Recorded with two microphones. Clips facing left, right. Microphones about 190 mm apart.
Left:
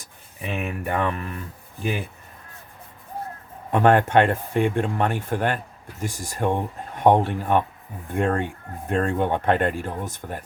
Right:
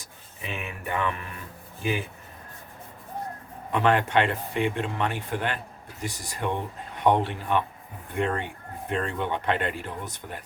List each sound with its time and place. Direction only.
0.5 s speech: 45° left (ahead or behind)
3.7 s speech: 50° left (ahead or behind)